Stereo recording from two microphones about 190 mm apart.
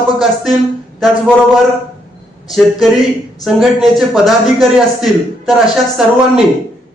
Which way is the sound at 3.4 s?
Centre (ahead or behind).